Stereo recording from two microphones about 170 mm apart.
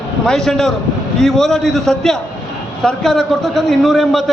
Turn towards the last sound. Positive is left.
turn(degrees=0)  # may be behind; listen again after turning